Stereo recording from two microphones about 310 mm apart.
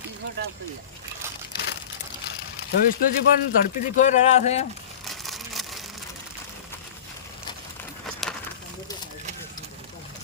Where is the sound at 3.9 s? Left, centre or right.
Left.